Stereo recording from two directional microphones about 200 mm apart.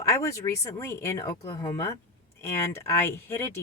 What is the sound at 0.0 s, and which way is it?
Speech, 15° left (ahead or behind).